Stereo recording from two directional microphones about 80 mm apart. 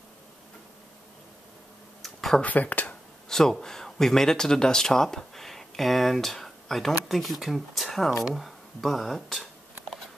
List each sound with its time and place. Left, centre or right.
2.0 s a sound: centre
2.4 s speech: centre
3.3 s speech: centre